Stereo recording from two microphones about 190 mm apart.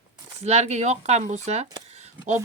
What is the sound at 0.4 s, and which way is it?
Speech, 35° right (ahead or behind).